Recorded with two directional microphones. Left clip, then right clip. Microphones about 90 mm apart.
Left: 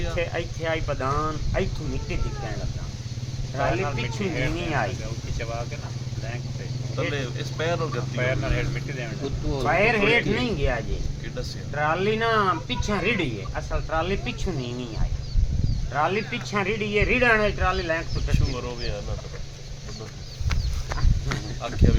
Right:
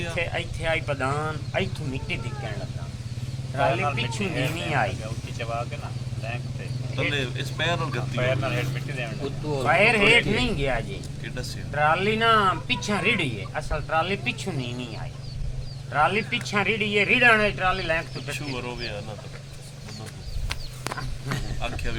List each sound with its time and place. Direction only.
0.0 s speech: 20° left (ahead or behind)
3.5 s speech: 10° left (ahead or behind)
4.2 s speech: 5° right (ahead or behind)
4.5 s speech: 20° left (ahead or behind)
5.4 s speech: 15° right (ahead or behind)
7.1 s speech: 15° left (ahead or behind)
8.2 s speech: centre (ahead or behind)
9.7 s speech: 20° left (ahead or behind)
15.9 s speech: 20° left (ahead or behind)
20.5 s a sound: 5° right (ahead or behind)